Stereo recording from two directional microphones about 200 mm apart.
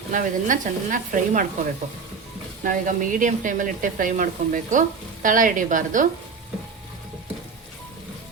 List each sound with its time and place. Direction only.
0.1 s speech: 40° right (ahead or behind)
2.6 s speech: 40° right (ahead or behind)